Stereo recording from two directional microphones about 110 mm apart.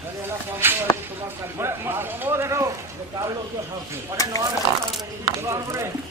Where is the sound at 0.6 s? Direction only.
20° right (ahead or behind).